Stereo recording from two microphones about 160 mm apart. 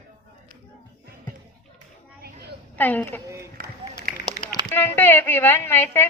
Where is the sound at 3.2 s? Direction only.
20° right (ahead or behind).